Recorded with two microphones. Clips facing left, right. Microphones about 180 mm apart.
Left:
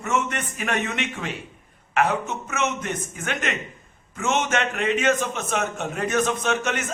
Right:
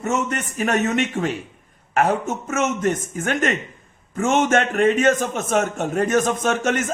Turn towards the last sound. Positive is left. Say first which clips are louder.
# right 4 dB
turn(degrees=-45)  # may be behind; listen again after turning